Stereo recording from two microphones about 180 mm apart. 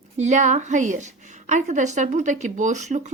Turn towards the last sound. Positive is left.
turn(degrees=-40)  # may be behind; listen again after turning